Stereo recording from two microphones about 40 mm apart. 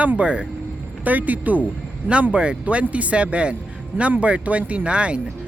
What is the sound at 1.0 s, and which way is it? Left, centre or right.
Speech, right.